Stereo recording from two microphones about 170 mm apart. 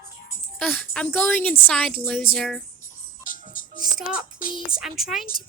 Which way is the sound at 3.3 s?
55° left (ahead or behind).